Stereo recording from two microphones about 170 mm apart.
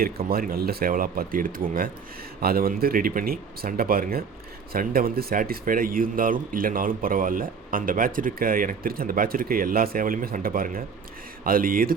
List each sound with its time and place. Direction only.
0.0 s speech: 60° right (ahead or behind)